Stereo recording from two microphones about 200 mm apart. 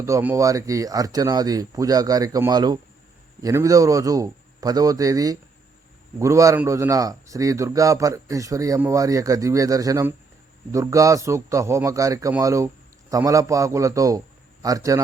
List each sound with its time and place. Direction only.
0.0 s a man's voice: 10° right (ahead or behind)